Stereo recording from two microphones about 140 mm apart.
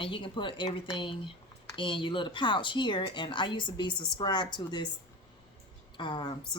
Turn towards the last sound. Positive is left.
turn(degrees=35)  # may be behind; listen again after turning